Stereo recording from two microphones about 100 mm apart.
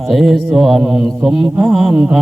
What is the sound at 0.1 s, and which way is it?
Mantra, centre (ahead or behind).